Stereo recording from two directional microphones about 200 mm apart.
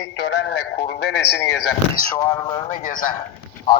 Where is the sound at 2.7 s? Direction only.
45° left (ahead or behind).